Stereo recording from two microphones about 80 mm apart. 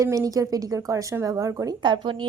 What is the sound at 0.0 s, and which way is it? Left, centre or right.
A woman's voice, right.